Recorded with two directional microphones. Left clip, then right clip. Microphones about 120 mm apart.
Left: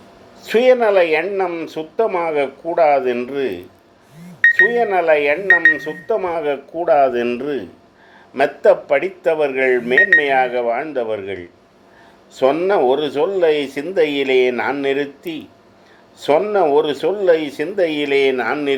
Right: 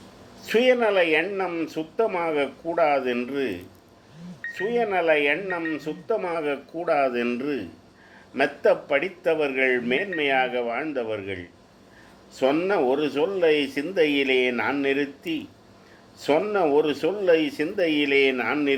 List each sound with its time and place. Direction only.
0.4 s speech: 45° left (ahead or behind)
4.6 s speech: 50° left (ahead or behind)